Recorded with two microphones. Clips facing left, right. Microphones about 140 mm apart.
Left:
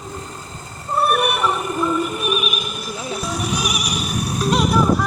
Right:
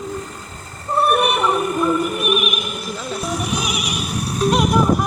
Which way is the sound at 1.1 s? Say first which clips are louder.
Right 2 dB; 20° right (ahead or behind).